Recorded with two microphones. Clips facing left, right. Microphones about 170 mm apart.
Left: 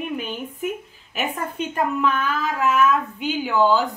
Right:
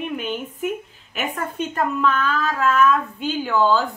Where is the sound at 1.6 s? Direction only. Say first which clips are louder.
Right 1 dB; 10° left (ahead or behind).